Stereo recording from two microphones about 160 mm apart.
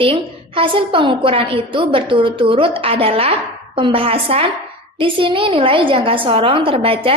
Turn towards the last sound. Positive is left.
turn(degrees=-35)  # may be behind; listen again after turning